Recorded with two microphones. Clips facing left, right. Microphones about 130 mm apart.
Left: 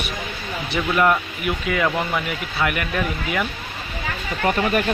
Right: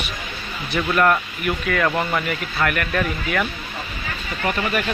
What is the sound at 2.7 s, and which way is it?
Speech, 15° left (ahead or behind).